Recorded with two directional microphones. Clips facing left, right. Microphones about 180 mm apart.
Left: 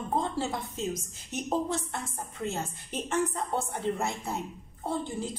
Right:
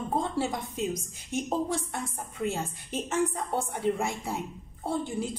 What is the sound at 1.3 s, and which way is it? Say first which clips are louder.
Speech: right 4 dB; 50° right (ahead or behind).